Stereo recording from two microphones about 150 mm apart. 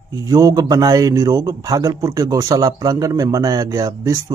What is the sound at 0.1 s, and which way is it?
A man's voice, 25° right (ahead or behind).